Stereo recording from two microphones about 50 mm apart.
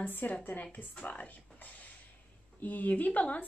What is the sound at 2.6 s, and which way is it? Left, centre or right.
Speech, left.